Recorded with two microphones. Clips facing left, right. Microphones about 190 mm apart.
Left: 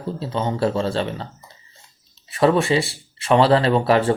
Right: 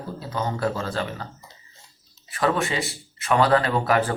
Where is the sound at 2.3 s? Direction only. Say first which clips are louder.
Left 7 dB; 25° left (ahead or behind).